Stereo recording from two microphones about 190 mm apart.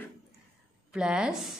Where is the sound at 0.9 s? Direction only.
5° right (ahead or behind).